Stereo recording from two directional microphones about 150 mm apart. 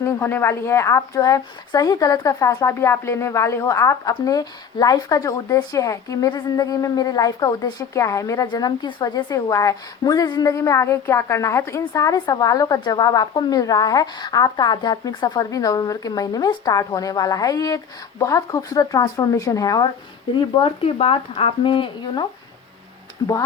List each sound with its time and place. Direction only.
0.0 s a woman's voice: 15° left (ahead or behind)
20.6 s speech: 35° left (ahead or behind)